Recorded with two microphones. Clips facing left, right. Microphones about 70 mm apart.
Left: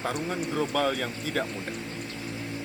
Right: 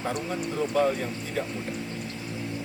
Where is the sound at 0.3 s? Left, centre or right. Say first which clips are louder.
Even; left.